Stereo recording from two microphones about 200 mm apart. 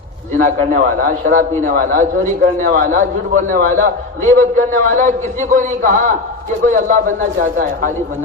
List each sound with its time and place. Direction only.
0.3 s a man's voice: 40° right (ahead or behind)